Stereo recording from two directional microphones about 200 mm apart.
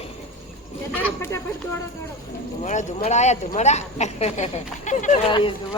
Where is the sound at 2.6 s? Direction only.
35° left (ahead or behind).